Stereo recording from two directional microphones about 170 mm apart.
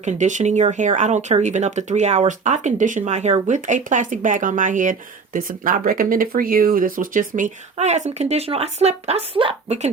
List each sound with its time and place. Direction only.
0.0 s speech: 45° right (ahead or behind)